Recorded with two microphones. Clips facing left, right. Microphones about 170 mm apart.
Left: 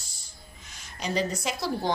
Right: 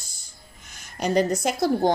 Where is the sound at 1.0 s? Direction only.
50° right (ahead or behind).